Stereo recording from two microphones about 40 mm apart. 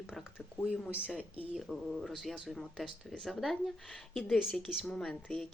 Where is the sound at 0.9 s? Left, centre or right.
Right.